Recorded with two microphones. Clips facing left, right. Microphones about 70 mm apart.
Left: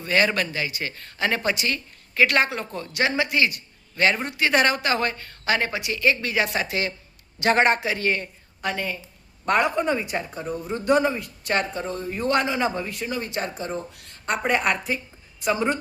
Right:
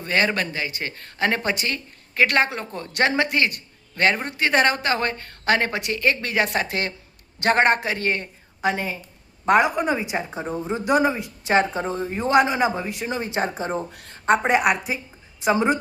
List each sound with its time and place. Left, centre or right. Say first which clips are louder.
0.0 s a man's voice: even; right
3.2 s a man's voice: right 1 dB; right
8.7 s speech: right 1 dB; centre
10.2 s speech: right 3 dB; right
10.8 s speech: even; centre
13.7 s speech: right 4 dB; right
14.6 s speech: right 3 dB; centre